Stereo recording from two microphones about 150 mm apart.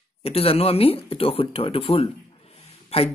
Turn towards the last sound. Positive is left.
turn(degrees=45)  # may be behind; listen again after turning